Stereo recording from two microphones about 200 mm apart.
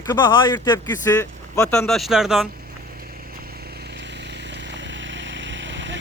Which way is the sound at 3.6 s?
55° right (ahead or behind).